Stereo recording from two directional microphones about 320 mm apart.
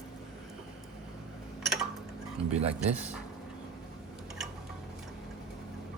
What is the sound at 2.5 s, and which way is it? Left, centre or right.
Speech, right.